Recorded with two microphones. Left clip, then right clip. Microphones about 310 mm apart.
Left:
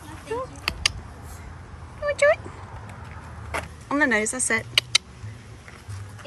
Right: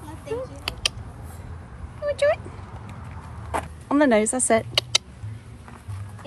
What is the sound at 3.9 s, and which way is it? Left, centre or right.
Speech, centre.